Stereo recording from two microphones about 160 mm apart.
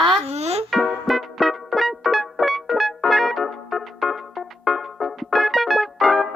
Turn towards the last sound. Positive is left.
turn(degrees=0)  # may be behind; listen again after turning